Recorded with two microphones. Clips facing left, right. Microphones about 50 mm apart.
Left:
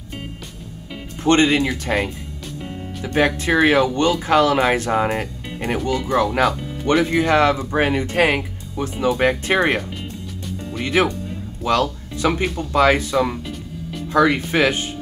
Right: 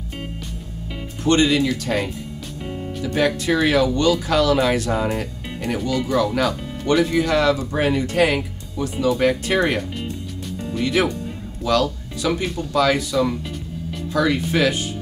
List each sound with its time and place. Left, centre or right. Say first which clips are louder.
1.2 s speech: left 2 dB; left
1.7 s speech: left 1 dB; left
6.9 s speech: left 1 dB; centre
7.2 s speech: left 2 dB; left
10.8 s speech: left 1 dB; left